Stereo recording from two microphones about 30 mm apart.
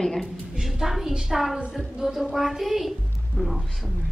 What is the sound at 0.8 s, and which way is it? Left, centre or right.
A woman's voice, centre.